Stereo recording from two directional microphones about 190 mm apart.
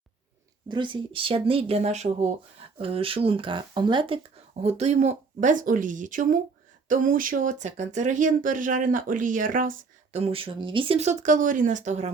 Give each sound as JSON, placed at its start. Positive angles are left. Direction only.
{"t": 0.7, "sound": "speech", "side_deg": -25}